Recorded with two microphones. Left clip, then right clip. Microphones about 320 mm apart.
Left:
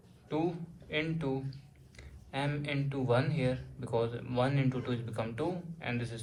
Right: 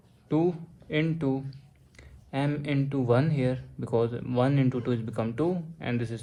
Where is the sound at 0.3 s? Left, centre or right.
Right.